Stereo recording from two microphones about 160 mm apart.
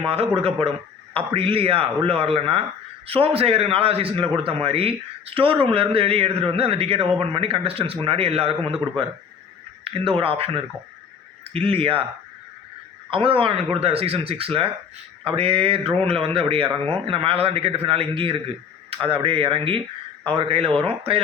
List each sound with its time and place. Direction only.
1.1 s a man's voice: 35° right (ahead or behind)
13.1 s a man's voice: 35° right (ahead or behind)